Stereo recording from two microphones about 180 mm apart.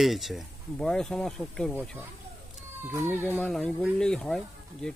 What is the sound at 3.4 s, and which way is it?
Speech, 5° left (ahead or behind).